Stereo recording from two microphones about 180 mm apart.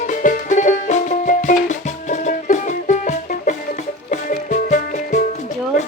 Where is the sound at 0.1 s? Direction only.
45° left (ahead or behind).